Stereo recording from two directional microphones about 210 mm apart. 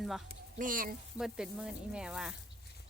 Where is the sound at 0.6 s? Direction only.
40° right (ahead or behind).